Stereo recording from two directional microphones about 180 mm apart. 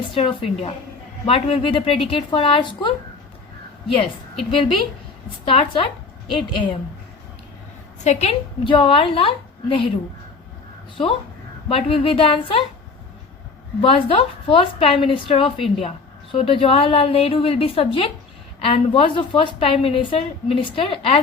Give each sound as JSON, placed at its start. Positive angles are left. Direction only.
{"t": 0.1, "sound": "speech", "side_deg": 30}
{"t": 5.5, "sound": "a woman's voice", "side_deg": 30}
{"t": 8.0, "sound": "speech", "side_deg": 40}
{"t": 10.9, "sound": "a woman's voice", "side_deg": 30}
{"t": 13.8, "sound": "a woman's voice", "side_deg": 30}